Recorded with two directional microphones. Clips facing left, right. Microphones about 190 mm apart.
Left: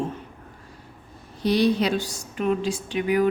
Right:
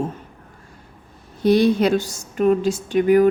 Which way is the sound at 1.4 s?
50° right (ahead or behind).